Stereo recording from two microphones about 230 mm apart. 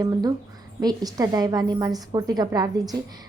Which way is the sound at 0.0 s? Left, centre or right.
Centre.